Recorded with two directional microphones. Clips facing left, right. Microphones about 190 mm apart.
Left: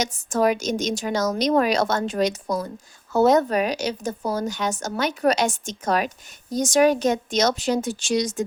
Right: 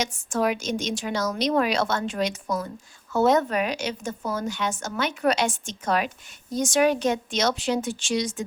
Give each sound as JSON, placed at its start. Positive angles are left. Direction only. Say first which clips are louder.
{"t": 0.0, "sound": "a woman's voice", "louder": "left 4 dB", "side_deg": 40}